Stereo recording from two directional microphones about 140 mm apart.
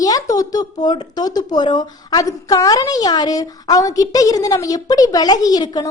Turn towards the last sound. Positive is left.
turn(degrees=30)  # may be behind; listen again after turning